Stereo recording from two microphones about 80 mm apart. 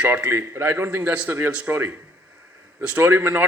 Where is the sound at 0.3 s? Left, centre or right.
Right.